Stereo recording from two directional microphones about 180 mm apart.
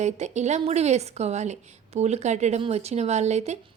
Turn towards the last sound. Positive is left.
turn(degrees=-40)  # may be behind; listen again after turning